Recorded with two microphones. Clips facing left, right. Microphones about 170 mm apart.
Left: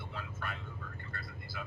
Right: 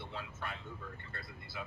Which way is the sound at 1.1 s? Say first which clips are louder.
Left 2 dB; 25° right (ahead or behind).